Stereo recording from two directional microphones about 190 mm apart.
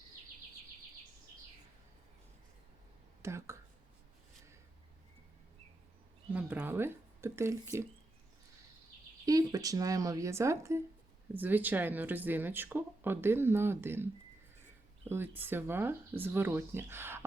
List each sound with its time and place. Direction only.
3.2 s whispering: 15° right (ahead or behind)
6.3 s speech: 10° right (ahead or behind)
9.2 s speech: 20° right (ahead or behind)
15.1 s speech: 10° right (ahead or behind)